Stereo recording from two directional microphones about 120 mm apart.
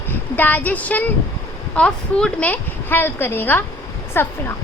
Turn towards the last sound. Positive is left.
turn(degrees=20)  # may be behind; listen again after turning